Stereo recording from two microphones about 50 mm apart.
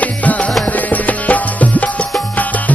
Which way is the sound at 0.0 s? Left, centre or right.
Left.